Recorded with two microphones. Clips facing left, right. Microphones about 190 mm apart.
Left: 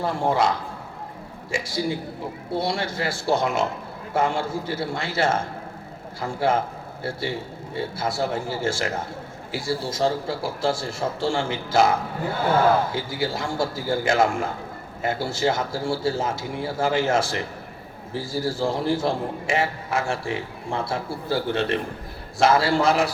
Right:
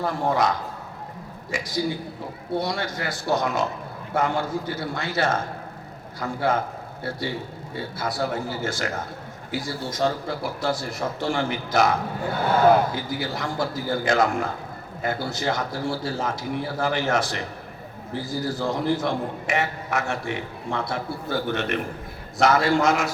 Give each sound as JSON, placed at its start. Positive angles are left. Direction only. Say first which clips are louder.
{"t": 0.0, "sound": "a man's voice", "louder": "left 1 dB", "side_deg": 25}